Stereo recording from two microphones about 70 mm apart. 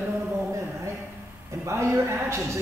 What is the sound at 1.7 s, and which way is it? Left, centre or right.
Speech, right.